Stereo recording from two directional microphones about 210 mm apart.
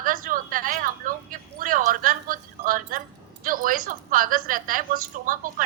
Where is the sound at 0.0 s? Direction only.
40° right (ahead or behind).